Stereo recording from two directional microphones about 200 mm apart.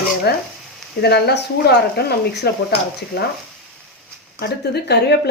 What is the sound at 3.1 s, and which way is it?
Speech, 55° left (ahead or behind).